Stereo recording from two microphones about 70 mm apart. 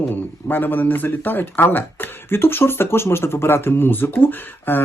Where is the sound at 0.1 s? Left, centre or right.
Left.